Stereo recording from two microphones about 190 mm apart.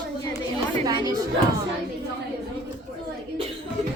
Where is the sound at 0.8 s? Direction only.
20° right (ahead or behind).